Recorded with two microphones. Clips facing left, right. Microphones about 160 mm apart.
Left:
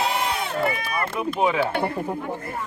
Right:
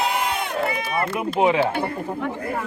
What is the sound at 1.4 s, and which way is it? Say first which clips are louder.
Speech: right 3 dB; 20° right (ahead or behind).